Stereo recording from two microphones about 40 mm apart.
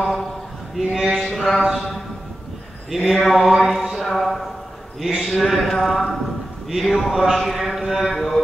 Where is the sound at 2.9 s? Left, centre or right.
Centre.